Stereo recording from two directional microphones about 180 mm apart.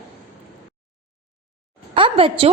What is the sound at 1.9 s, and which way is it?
Speech, 30° right (ahead or behind).